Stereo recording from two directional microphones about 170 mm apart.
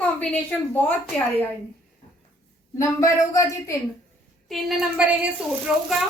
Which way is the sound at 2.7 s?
20° left (ahead or behind).